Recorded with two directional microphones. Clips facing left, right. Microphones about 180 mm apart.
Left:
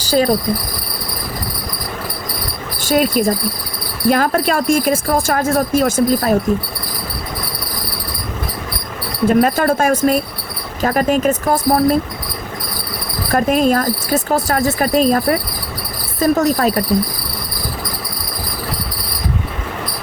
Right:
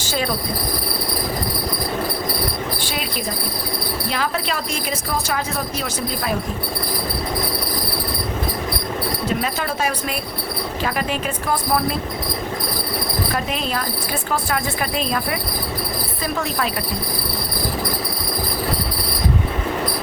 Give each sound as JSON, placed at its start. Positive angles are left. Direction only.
{"t": 0.0, "sound": "speech", "side_deg": 40}
{"t": 2.8, "sound": "speech", "side_deg": 45}
{"t": 9.2, "sound": "speech", "side_deg": 50}
{"t": 13.3, "sound": "speech", "side_deg": 50}